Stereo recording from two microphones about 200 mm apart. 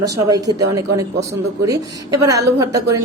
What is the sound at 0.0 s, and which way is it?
A woman's voice, 15° right (ahead or behind).